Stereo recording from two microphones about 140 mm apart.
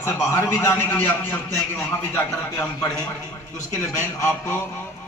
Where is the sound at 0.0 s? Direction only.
20° left (ahead or behind).